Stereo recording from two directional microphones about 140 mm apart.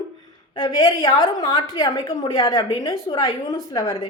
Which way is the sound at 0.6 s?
35° left (ahead or behind).